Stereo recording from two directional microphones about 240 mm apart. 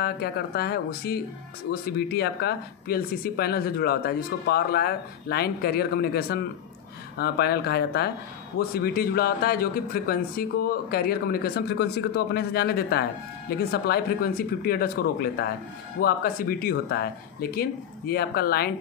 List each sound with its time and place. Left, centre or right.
0.0 s speech: left